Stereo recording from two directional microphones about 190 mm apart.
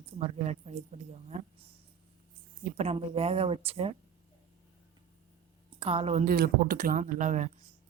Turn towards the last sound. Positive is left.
turn(degrees=-40)  # may be behind; listen again after turning